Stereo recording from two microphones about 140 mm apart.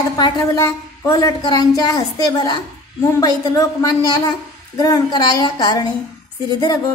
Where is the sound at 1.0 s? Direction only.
25° left (ahead or behind).